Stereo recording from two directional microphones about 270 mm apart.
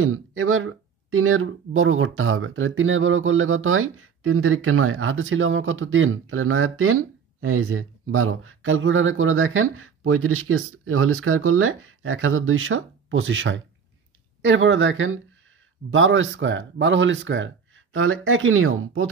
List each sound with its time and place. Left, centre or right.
0.0 s speech: right